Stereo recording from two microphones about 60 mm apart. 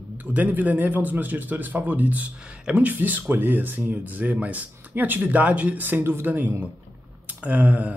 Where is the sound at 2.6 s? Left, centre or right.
Centre.